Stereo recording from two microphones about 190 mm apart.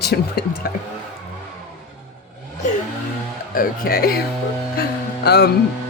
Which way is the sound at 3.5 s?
50° left (ahead or behind).